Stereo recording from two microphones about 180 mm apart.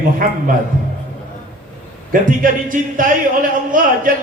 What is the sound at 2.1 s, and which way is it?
Speech, 50° right (ahead or behind).